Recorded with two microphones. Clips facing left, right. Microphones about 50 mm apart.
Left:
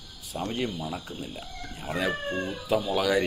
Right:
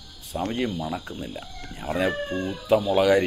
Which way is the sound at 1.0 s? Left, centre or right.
Centre.